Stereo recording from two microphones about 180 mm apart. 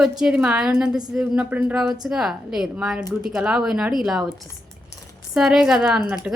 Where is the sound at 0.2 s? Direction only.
5° right (ahead or behind).